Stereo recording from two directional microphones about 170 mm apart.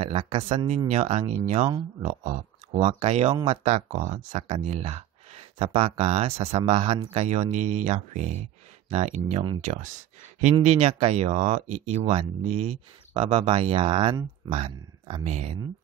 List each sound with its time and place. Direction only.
0.0 s speech: 35° right (ahead or behind)